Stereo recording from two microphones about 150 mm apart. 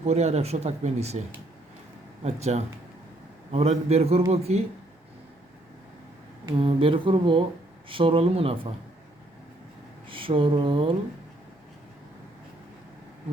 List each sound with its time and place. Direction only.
0.0 s speech: 45° right (ahead or behind)
2.2 s speech: 45° right (ahead or behind)
6.6 s speech: 35° right (ahead or behind)
10.1 s mantra: 35° right (ahead or behind)